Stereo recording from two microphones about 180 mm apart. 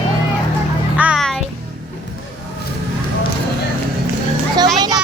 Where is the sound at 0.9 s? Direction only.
5° right (ahead or behind).